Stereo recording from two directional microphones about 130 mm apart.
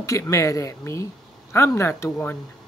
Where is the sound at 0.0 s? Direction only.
25° left (ahead or behind).